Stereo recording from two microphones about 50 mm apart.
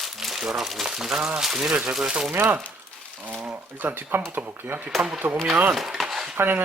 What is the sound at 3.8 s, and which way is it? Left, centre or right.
Speech, right.